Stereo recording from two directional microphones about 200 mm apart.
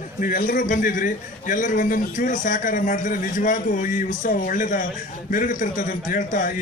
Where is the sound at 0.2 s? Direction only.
45° left (ahead or behind).